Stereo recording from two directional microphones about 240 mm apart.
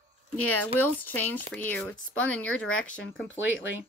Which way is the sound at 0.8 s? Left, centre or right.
Centre.